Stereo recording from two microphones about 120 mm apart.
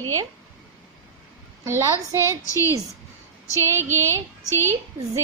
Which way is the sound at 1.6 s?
20° right (ahead or behind).